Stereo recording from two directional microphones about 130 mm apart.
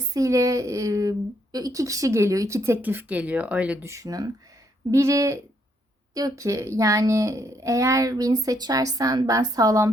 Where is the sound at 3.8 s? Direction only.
25° right (ahead or behind).